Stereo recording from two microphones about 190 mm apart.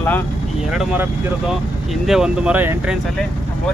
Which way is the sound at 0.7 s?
Centre (ahead or behind).